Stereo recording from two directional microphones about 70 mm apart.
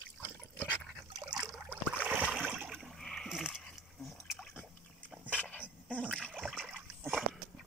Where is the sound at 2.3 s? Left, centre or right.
Centre.